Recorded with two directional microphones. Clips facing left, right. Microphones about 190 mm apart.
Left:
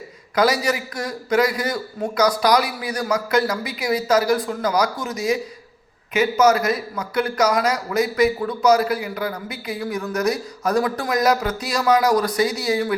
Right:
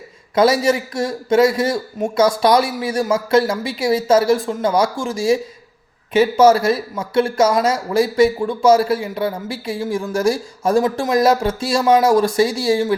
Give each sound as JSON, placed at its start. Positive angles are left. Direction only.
{"t": 0.3, "sound": "speech", "side_deg": -25}